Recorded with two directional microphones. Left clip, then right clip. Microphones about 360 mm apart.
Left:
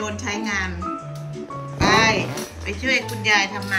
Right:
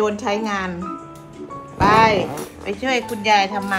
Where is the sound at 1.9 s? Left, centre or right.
Centre.